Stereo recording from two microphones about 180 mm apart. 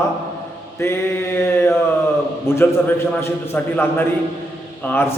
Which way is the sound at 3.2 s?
10° left (ahead or behind).